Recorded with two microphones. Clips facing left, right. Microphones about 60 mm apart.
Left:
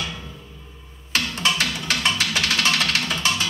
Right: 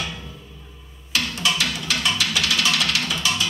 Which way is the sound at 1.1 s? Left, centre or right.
Left.